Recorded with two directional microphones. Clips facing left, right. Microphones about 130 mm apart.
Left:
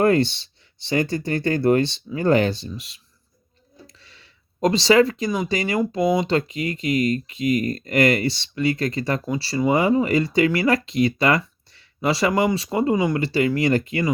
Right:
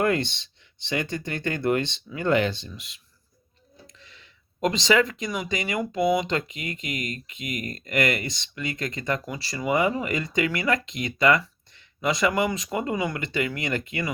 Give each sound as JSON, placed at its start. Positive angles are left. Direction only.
{"t": 0.0, "sound": "speech", "side_deg": 35}
{"t": 4.0, "sound": "speech", "side_deg": 35}